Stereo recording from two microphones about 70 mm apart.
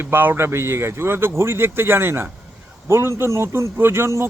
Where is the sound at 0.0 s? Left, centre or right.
Right.